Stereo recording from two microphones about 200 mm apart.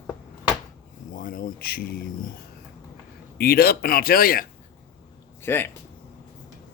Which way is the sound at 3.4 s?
50° left (ahead or behind).